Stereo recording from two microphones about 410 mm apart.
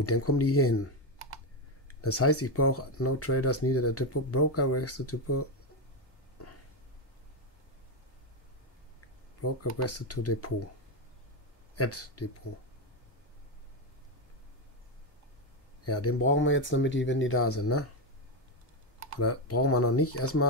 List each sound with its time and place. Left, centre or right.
0.0 s speech: left
1.9 s speech: left
9.4 s speech: left
11.7 s speech: left
15.8 s speech: left
19.1 s speech: left